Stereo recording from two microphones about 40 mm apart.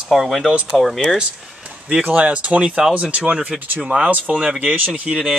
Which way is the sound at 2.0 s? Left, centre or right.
Right.